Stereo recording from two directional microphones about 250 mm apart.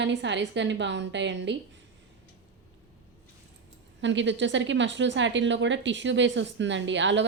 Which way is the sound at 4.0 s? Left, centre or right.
Right.